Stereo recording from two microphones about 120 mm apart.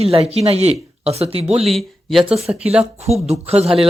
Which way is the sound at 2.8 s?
60° right (ahead or behind).